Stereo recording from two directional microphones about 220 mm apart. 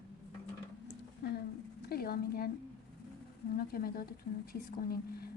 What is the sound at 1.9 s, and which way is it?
Speech, 45° left (ahead or behind).